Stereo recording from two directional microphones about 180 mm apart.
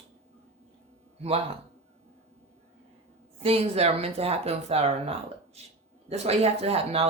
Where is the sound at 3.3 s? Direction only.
35° right (ahead or behind).